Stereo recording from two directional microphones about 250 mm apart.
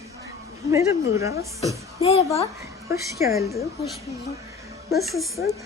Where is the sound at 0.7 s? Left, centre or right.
Centre.